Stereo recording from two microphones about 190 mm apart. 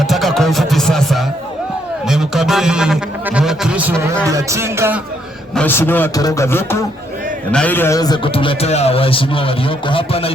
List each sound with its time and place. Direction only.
0.0 s music: centre (ahead or behind)
2.0 s a man's voice: centre (ahead or behind)
5.5 s a man's voice: 10° left (ahead or behind); by 10.3 s 30° left (ahead or behind)